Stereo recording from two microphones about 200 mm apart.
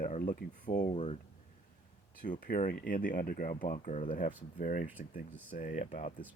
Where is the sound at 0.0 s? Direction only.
40° left (ahead or behind).